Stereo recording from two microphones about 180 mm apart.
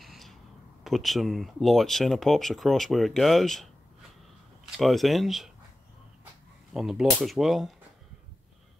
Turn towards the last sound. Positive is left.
turn(degrees=0)  # may be behind; listen again after turning